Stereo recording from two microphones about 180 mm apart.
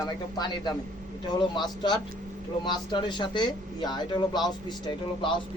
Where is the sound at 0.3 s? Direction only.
20° left (ahead or behind).